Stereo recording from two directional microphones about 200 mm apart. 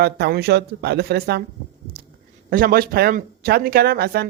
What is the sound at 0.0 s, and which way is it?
Speech, 50° right (ahead or behind).